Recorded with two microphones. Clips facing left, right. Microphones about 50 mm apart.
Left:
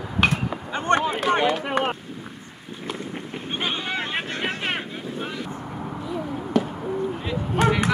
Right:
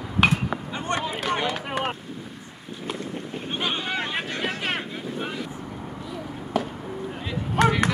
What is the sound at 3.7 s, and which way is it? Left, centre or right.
Vehicle, centre.